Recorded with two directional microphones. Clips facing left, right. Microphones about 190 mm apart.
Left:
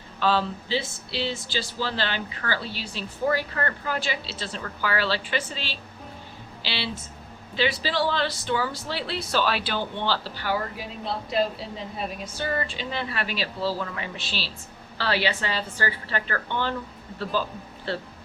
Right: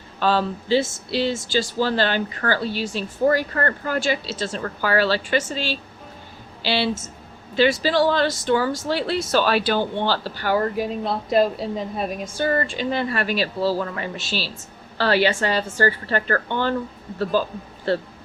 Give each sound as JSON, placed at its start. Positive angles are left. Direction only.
{"t": 0.2, "sound": "speech", "side_deg": -45}
{"t": 17.9, "sound": "speech", "side_deg": -45}